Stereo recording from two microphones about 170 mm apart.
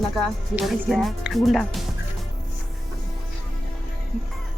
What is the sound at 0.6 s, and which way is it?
Speech, centre (ahead or behind).